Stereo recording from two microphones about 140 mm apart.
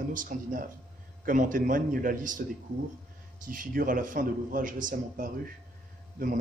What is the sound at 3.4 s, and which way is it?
Speech, 75° right (ahead or behind).